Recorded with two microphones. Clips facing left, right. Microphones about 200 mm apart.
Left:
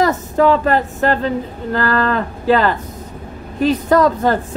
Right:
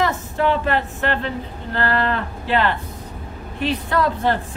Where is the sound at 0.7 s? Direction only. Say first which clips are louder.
Left 6 dB; 40° left (ahead or behind).